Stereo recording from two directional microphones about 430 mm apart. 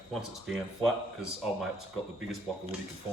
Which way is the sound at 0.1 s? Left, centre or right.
Centre.